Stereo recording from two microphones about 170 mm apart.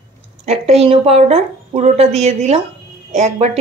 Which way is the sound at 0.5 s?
40° right (ahead or behind).